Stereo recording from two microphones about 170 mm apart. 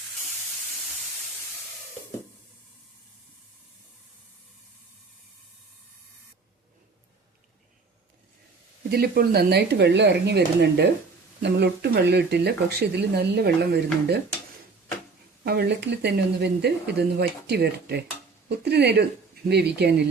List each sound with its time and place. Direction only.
8.9 s speech: 65° right (ahead or behind)
15.4 s speech: 75° right (ahead or behind)